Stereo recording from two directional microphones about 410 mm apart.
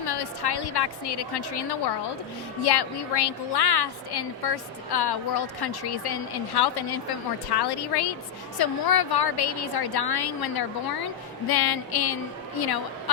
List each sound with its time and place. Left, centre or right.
0.0 s a woman's voice: left